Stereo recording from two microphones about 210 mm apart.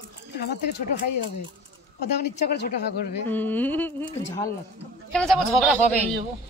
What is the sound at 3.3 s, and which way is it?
Speech, 10° left (ahead or behind).